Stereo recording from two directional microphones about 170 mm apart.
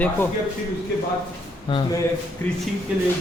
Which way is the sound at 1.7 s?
30° left (ahead or behind).